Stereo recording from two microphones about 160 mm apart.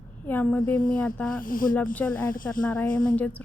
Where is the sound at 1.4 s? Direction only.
60° left (ahead or behind).